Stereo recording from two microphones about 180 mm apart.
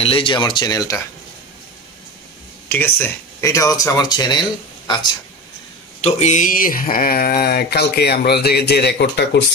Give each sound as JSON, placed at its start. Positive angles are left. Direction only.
{"t": 0.0, "sound": "speech", "side_deg": 30}
{"t": 2.7, "sound": "speech", "side_deg": 10}
{"t": 5.9, "sound": "speech", "side_deg": 35}